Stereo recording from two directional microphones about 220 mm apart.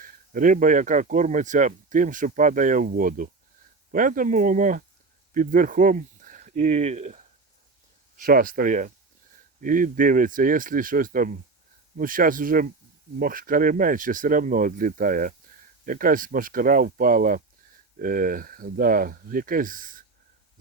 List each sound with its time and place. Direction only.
0.0 s speech: 40° right (ahead or behind)